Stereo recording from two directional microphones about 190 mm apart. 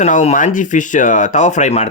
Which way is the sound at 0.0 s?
40° left (ahead or behind).